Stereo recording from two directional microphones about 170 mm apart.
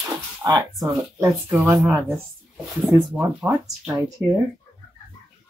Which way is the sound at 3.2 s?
10° right (ahead or behind).